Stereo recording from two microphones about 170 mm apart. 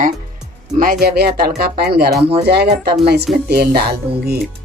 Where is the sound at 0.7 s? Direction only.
60° right (ahead or behind).